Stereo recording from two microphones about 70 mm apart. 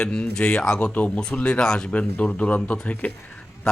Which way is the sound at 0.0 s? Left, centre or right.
Centre.